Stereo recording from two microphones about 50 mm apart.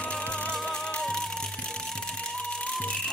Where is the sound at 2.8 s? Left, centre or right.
Centre.